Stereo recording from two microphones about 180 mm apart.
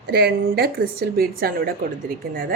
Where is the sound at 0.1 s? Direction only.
60° right (ahead or behind).